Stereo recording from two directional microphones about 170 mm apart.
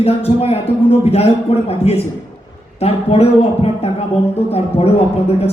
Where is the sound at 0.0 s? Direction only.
35° left (ahead or behind).